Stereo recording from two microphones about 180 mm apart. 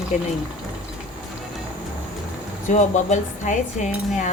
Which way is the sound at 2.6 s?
40° left (ahead or behind).